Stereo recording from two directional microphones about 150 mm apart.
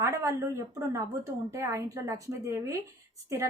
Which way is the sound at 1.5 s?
20° right (ahead or behind).